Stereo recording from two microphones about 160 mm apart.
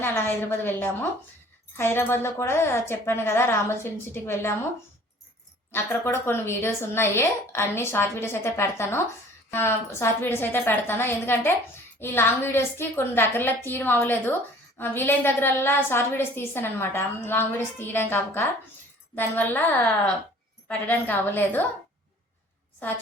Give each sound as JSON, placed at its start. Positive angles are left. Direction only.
{"t": 0.0, "sound": "a woman's voice", "side_deg": 15}
{"t": 5.7, "sound": "a woman's voice", "side_deg": 15}